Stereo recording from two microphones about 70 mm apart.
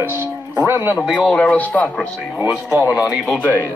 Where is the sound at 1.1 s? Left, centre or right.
Centre.